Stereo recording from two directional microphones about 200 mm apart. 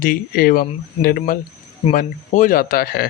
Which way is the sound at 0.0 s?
45° left (ahead or behind).